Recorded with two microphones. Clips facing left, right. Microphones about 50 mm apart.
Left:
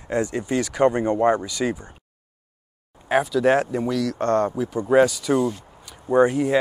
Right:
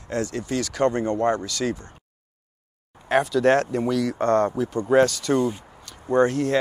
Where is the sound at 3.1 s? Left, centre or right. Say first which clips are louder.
Even; centre.